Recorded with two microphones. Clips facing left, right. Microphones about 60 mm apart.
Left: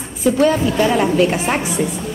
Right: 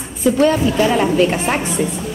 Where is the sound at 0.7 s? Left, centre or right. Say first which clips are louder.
Even; right.